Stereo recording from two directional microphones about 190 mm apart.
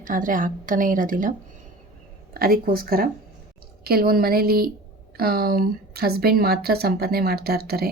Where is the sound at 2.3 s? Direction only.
50° right (ahead or behind).